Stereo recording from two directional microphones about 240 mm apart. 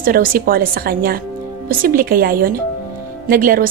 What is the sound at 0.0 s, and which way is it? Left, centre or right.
A woman's voice, right.